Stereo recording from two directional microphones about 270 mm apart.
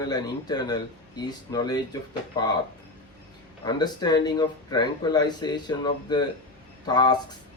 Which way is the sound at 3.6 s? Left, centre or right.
Centre.